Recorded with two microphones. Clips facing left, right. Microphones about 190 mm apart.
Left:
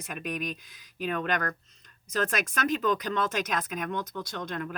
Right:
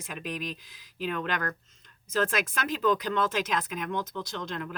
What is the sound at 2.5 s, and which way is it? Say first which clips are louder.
Speech: even; 45° left (ahead or behind).